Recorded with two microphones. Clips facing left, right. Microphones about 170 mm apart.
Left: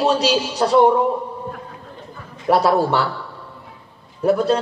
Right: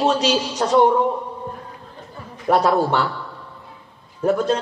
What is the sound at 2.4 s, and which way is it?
Speech, 35° left (ahead or behind).